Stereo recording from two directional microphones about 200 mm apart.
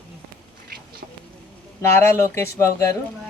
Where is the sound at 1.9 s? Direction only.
10° left (ahead or behind).